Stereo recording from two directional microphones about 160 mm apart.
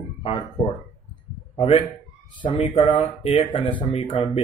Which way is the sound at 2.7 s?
30° left (ahead or behind).